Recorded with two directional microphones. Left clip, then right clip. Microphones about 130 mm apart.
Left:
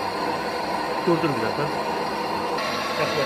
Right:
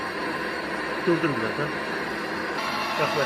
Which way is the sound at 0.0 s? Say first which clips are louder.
Left 3 dB; 30° left (ahead or behind).